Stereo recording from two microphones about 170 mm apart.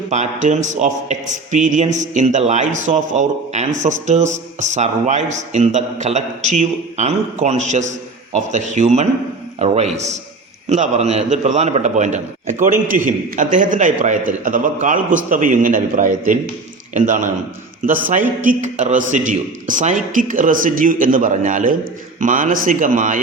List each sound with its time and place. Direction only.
0.1 s a man's voice: 45° right (ahead or behind)